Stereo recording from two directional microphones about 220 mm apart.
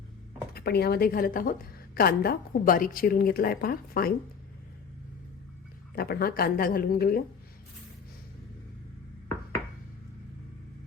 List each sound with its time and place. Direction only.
0.5 s a woman's voice: 45° left (ahead or behind)
6.0 s a woman's voice: 45° left (ahead or behind)